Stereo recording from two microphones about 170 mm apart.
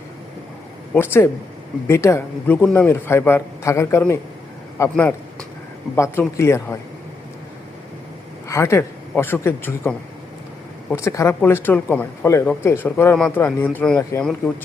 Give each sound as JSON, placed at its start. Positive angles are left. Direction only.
{"t": 0.9, "sound": "a man's voice", "side_deg": 15}
{"t": 8.4, "sound": "a man's voice", "side_deg": 15}